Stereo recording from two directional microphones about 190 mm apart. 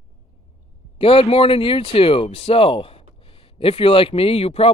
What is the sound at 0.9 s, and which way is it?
Speech, 30° left (ahead or behind).